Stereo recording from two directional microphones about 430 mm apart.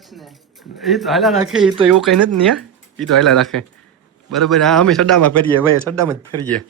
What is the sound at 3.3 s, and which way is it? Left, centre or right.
A man's voice, centre.